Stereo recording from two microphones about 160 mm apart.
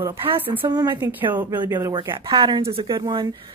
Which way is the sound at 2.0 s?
35° right (ahead or behind).